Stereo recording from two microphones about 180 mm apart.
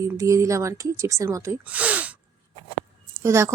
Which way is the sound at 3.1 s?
15° right (ahead or behind).